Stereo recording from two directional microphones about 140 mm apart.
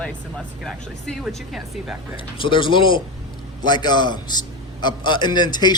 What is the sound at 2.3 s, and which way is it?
A man's voice, 35° left (ahead or behind).